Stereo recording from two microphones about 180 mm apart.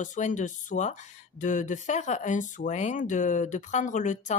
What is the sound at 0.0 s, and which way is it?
Speech, 45° left (ahead or behind).